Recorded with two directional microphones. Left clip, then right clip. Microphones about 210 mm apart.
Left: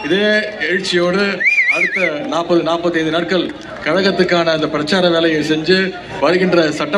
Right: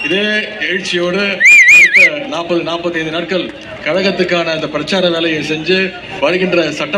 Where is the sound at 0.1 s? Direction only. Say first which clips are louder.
Left 4 dB; 35° left (ahead or behind).